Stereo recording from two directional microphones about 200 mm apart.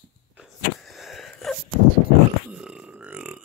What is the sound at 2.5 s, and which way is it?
Burping, 5° right (ahead or behind).